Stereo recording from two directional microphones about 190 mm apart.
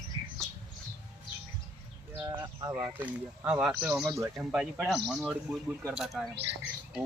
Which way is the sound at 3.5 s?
5° right (ahead or behind).